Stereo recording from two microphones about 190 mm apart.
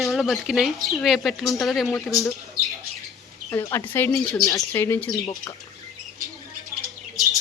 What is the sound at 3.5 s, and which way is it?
Speech, 15° left (ahead or behind).